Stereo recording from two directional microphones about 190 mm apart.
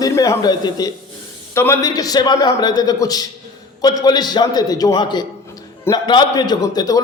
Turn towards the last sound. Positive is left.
turn(degrees=20)  # may be behind; listen again after turning